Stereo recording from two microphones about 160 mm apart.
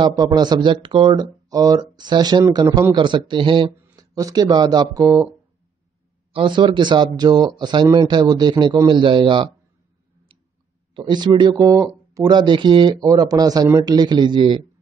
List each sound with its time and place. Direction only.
0.0 s speech: 25° right (ahead or behind)
6.3 s speech: 30° right (ahead or behind)
11.0 s speech: 30° right (ahead or behind)